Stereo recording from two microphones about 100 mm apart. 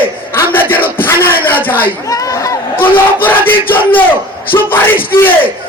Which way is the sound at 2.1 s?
35° left (ahead or behind).